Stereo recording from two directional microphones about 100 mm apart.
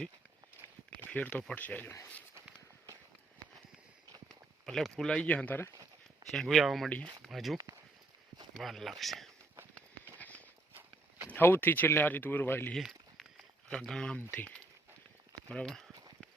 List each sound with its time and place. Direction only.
1.1 s speech: 15° left (ahead or behind)
4.3 s speech: 5° left (ahead or behind)
6.3 s speech: 5° left (ahead or behind)
10.2 s walk: 15° left (ahead or behind)
11.3 s speech: 20° left (ahead or behind)
12.7 s a sound: 5° left (ahead or behind)
14.2 s speech: 15° left (ahead or behind)